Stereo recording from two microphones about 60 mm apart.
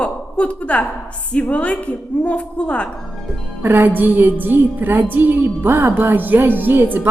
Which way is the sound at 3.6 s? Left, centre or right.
Right.